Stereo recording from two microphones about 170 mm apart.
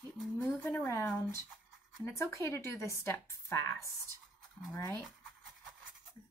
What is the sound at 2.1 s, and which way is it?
Speech, 15° left (ahead or behind).